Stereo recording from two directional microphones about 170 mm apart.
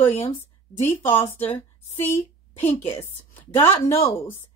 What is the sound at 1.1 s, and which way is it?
Speech, 10° left (ahead or behind).